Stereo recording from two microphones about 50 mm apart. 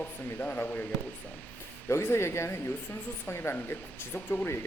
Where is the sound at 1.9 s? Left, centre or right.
Left.